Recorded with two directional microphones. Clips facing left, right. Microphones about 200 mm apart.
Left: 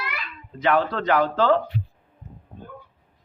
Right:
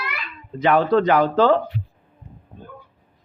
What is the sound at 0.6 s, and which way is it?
Speech, 15° right (ahead or behind).